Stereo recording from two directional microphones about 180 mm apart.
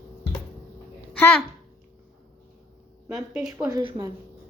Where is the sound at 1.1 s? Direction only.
10° left (ahead or behind).